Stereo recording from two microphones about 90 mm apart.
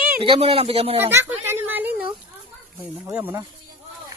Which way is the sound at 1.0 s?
25° right (ahead or behind).